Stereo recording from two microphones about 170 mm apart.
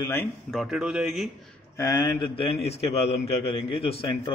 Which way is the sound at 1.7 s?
20° left (ahead or behind).